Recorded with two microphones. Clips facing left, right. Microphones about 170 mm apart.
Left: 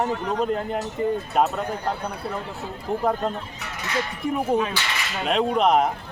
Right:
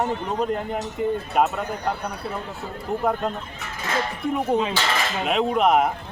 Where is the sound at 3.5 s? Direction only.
50° right (ahead or behind).